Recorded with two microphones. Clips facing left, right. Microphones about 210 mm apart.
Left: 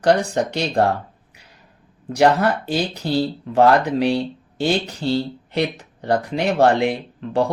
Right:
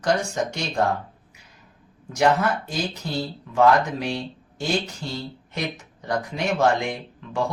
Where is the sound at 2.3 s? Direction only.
35° left (ahead or behind).